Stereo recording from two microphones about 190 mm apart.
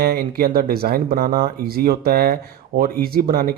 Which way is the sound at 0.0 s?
50° right (ahead or behind).